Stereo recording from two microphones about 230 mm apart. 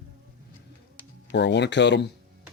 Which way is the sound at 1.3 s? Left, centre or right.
Left.